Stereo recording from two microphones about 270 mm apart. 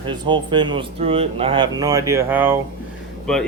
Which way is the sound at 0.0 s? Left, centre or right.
Centre.